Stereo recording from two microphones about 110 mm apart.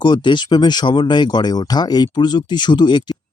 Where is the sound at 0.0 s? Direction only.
45° left (ahead or behind).